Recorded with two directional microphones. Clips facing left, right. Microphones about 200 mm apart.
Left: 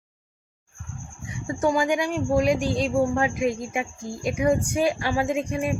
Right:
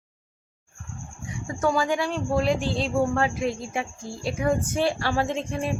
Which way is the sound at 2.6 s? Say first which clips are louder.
Left 3 dB; 45° left (ahead or behind).